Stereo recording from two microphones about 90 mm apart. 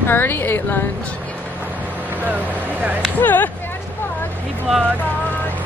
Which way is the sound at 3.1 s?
20° left (ahead or behind).